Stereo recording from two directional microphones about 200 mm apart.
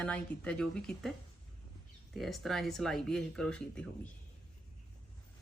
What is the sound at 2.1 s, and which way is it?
Speech, centre (ahead or behind).